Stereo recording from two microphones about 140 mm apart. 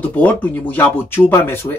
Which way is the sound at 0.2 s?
10° left (ahead or behind).